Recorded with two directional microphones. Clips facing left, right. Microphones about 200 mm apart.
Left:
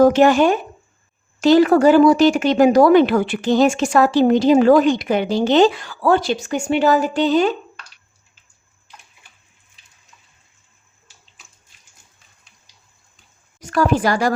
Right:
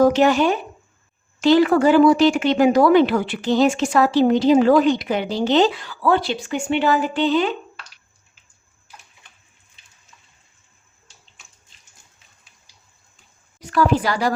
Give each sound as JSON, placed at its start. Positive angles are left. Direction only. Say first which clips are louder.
{"t": 0.1, "sound": "speech", "louder": "left 3 dB", "side_deg": 50}
{"t": 13.6, "sound": "speech", "louder": "left 1 dB", "side_deg": 45}